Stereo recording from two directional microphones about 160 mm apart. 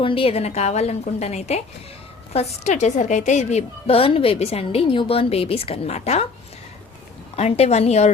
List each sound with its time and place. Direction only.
0.0 s a woman's voice: 35° left (ahead or behind)
7.3 s a woman's voice: 40° left (ahead or behind)